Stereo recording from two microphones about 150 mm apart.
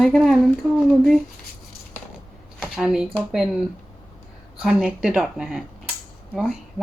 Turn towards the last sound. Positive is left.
turn(degrees=0)  # may be behind; listen again after turning